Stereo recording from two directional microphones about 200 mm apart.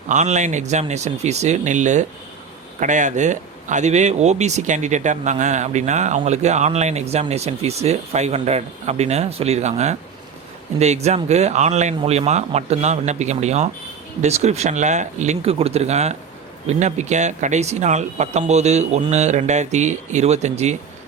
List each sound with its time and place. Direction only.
0.1 s speech: 35° right (ahead or behind)